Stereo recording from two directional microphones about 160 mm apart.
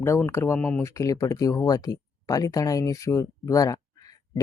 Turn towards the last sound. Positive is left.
turn(degrees=20)  # may be behind; listen again after turning